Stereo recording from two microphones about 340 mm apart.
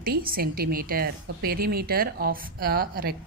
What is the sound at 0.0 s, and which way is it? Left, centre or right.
Speech, right.